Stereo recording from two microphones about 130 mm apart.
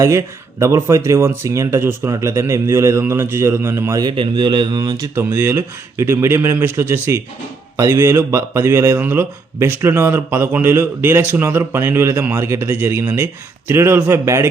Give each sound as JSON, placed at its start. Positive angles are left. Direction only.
{"t": 0.0, "sound": "speech", "side_deg": -20}
{"t": 4.0, "sound": "speech", "side_deg": -40}
{"t": 5.1, "sound": "speech", "side_deg": -20}